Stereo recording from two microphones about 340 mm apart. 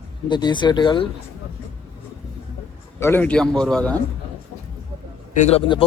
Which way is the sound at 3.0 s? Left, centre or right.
Centre.